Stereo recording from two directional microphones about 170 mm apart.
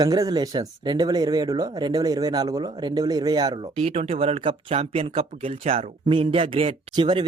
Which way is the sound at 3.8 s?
35° right (ahead or behind).